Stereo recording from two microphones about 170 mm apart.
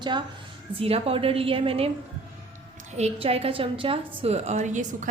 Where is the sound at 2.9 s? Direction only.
40° right (ahead or behind).